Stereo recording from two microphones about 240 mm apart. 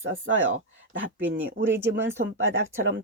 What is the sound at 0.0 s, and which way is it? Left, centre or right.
Speech, right.